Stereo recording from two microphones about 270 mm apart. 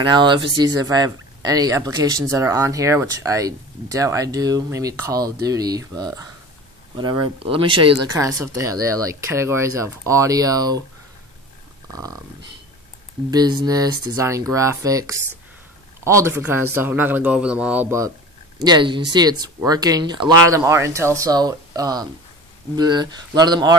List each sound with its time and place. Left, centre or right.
0.0 s speech: centre
11.9 s speech: centre